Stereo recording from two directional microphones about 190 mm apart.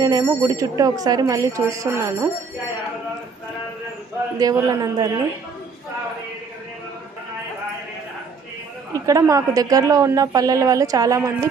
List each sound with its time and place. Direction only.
0.0 s a woman's voice: 20° right (ahead or behind)
4.7 s speech: 20° right (ahead or behind)
8.9 s a woman's voice: 15° right (ahead or behind)